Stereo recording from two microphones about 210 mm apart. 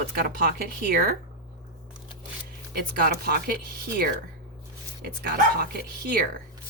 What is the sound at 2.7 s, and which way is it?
Speech, 45° right (ahead or behind).